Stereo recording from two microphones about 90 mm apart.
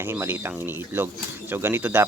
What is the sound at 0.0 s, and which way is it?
Speech, 25° right (ahead or behind).